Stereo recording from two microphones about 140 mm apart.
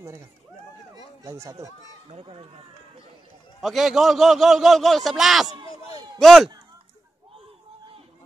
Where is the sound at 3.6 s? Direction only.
Centre (ahead or behind).